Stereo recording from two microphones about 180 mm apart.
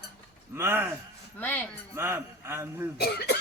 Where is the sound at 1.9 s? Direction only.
15° right (ahead or behind).